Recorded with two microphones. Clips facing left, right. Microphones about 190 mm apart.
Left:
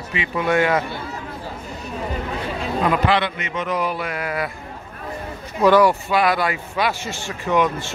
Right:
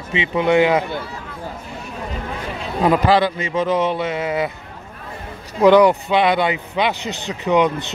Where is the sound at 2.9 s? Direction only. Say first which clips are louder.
Right 5 dB; 35° right (ahead or behind).